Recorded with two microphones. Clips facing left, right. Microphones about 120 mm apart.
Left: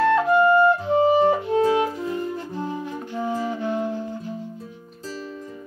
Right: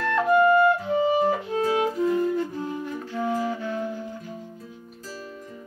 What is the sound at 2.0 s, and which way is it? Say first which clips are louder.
Flute: right 4 dB; 25° left (ahead or behind).